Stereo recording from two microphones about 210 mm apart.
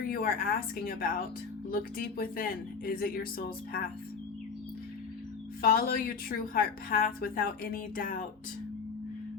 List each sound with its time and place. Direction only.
0.0 s a woman's voice: 45° left (ahead or behind)
5.6 s a woman's voice: 45° left (ahead or behind)